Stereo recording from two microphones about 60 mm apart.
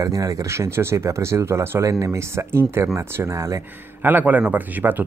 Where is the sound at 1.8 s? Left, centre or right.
Right.